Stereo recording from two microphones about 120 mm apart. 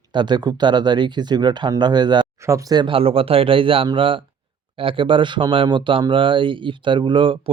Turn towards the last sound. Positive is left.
turn(degrees=-45)  # may be behind; listen again after turning